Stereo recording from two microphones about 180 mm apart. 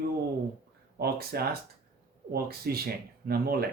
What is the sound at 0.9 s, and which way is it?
Speech, 60° right (ahead or behind).